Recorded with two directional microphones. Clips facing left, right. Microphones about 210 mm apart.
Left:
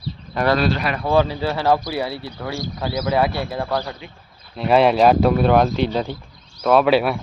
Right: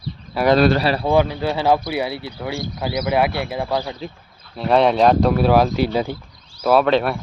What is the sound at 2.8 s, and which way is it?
Speech, 10° right (ahead or behind).